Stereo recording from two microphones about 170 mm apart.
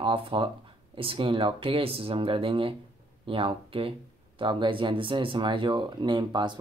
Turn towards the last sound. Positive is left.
turn(degrees=-25)  # may be behind; listen again after turning